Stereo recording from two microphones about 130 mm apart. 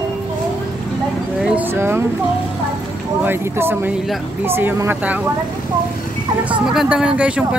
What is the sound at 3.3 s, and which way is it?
Speech, 15° right (ahead or behind).